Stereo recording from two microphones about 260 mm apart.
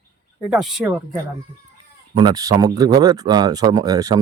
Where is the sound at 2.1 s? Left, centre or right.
Centre.